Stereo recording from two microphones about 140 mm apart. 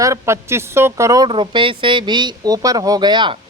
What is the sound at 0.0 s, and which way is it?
A woman's voice, 20° right (ahead or behind).